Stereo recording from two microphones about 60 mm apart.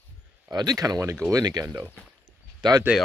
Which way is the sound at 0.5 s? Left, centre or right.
Right.